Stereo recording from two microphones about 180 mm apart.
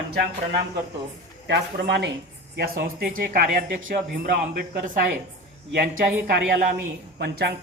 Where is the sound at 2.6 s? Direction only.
55° right (ahead or behind).